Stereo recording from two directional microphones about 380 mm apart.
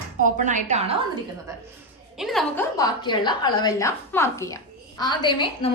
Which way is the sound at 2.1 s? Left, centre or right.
Centre.